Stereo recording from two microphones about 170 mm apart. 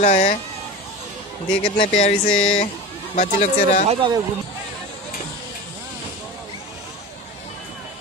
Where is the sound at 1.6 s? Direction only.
35° left (ahead or behind).